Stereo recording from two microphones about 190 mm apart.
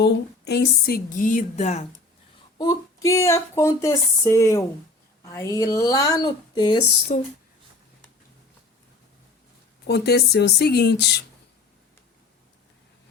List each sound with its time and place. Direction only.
0.0 s speech: 60° left (ahead or behind); by 1.9 s 35° left (ahead or behind)
2.6 s a woman's voice: 20° left (ahead or behind)
7.1 s speech: 40° left (ahead or behind)
9.8 s speech: 60° left (ahead or behind)